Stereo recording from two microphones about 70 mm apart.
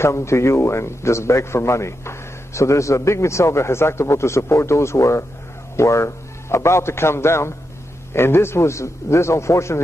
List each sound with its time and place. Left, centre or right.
0.0 s a man's voice: left